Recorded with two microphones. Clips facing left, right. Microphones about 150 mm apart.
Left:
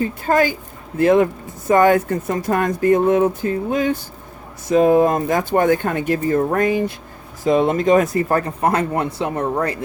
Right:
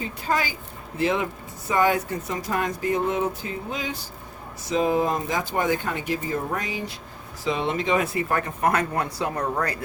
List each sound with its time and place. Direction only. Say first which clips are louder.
0.0 s speech: left 9 dB; 50° left (ahead or behind); by 9.7 s 25° left (ahead or behind)